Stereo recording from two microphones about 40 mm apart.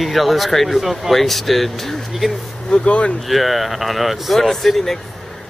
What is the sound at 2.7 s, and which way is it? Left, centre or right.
Speech, left.